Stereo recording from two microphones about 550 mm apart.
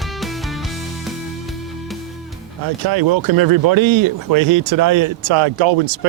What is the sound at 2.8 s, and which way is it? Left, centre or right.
Speech, right.